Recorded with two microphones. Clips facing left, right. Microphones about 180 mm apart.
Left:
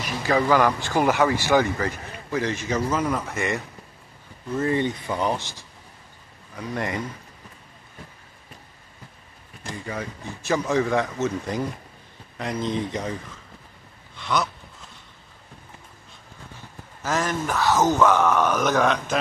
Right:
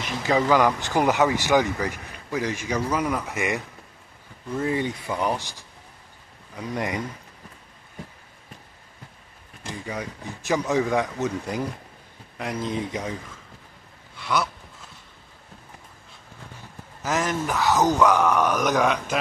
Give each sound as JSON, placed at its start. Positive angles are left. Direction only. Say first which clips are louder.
{"t": 0.0, "sound": "speech", "louder": "even", "side_deg": -20}
{"t": 9.8, "sound": "speech", "louder": "left 1 dB", "side_deg": -15}
{"t": 14.1, "sound": "a sound", "louder": "even", "side_deg": -5}
{"t": 17.0, "sound": "speech", "louder": "even", "side_deg": -20}